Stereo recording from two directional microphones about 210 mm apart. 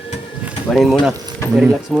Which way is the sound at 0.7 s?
Centre (ahead or behind).